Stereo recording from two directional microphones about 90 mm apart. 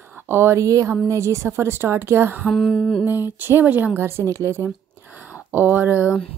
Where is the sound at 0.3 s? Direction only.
30° right (ahead or behind).